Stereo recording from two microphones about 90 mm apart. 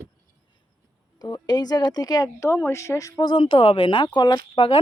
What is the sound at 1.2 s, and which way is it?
Speech, 50° left (ahead or behind).